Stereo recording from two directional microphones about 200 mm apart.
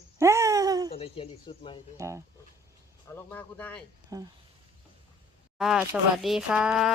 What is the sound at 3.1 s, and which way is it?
Speech, 10° left (ahead or behind).